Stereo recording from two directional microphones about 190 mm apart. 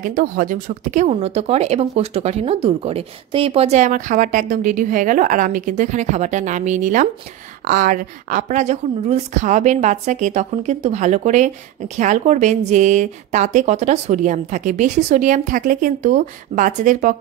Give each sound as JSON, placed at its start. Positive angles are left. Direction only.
{"t": 0.0, "sound": "speech", "side_deg": -45}